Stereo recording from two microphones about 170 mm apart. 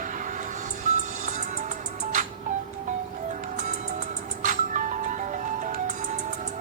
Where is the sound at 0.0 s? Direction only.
50° right (ahead or behind).